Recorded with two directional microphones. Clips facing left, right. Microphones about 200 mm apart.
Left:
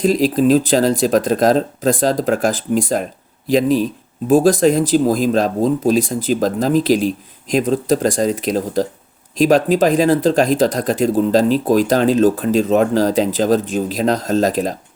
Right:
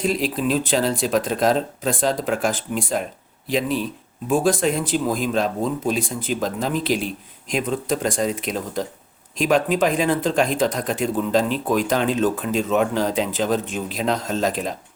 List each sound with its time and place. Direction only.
0.0 s speech: 40° left (ahead or behind)